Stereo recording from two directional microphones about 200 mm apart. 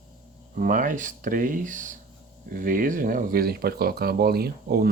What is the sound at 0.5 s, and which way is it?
Speech, 45° right (ahead or behind).